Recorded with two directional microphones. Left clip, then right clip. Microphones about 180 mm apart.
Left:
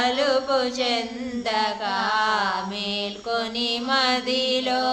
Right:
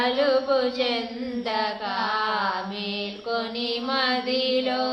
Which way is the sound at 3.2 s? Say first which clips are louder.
Left 2 dB; 40° left (ahead or behind).